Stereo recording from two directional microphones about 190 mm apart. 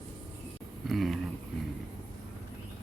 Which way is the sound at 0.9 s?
Centre (ahead or behind).